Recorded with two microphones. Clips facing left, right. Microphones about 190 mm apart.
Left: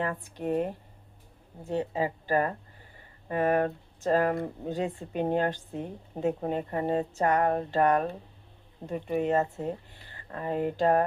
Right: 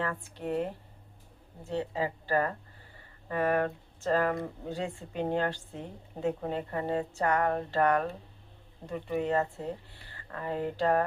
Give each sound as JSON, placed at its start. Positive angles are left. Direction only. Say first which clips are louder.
{"t": 0.0, "sound": "speech", "louder": "left 3 dB", "side_deg": 15}